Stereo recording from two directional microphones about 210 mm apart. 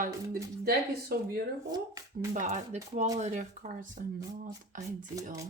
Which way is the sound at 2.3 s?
35° right (ahead or behind).